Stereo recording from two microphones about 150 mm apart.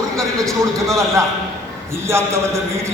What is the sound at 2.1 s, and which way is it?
Speech, 20° right (ahead or behind).